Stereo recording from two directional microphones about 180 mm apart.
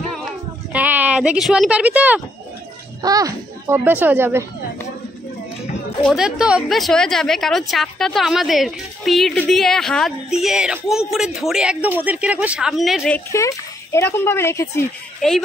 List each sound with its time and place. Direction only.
0.7 s speech: 10° right (ahead or behind)
3.0 s speech: 20° right (ahead or behind)
6.0 s a woman's voice: 5° right (ahead or behind)
13.3 s speech: 15° left (ahead or behind)
15.2 s a woman's voice: 5° left (ahead or behind)